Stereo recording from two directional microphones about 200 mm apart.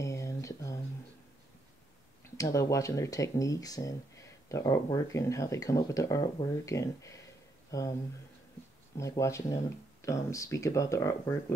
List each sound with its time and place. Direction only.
0.0 s a sound: 15° left (ahead or behind)
2.3 s speech: 15° left (ahead or behind)
8.9 s speech: 15° left (ahead or behind)